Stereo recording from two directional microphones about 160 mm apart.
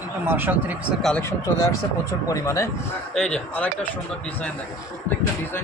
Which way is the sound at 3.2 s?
5° left (ahead or behind).